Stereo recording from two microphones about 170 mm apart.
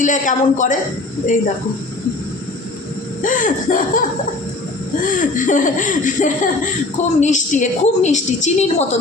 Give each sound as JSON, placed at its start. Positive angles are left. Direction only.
{"t": 0.0, "sound": "a woman's voice", "side_deg": 50}
{"t": 3.2, "sound": "a woman's voice", "side_deg": 50}
{"t": 5.0, "sound": "a woman's voice", "side_deg": 50}